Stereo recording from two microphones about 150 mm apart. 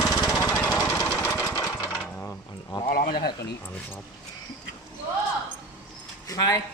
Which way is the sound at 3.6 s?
15° left (ahead or behind).